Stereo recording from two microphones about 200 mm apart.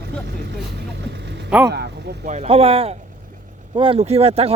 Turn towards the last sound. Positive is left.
turn(degrees=-30)  # may be behind; listen again after turning